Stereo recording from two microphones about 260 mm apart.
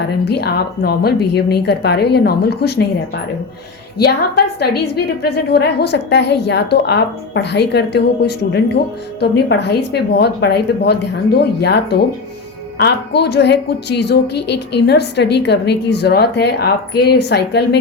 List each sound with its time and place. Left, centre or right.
0.3 s a woman's voice: left
4.6 s a woman's voice: left